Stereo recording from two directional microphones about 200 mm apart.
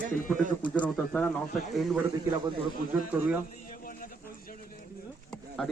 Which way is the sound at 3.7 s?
45° left (ahead or behind).